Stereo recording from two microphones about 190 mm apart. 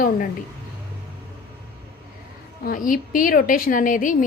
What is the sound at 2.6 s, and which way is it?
A woman's voice, 45° left (ahead or behind).